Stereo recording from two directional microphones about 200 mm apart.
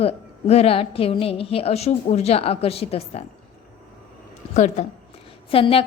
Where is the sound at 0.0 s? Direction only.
30° left (ahead or behind).